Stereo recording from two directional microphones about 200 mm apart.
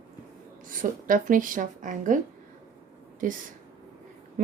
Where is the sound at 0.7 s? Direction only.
45° right (ahead or behind).